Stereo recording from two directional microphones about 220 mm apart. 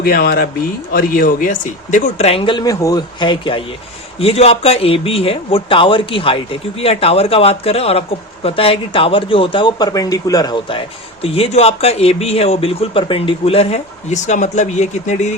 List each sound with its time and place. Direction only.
0.0 s speech: 45° left (ahead or behind)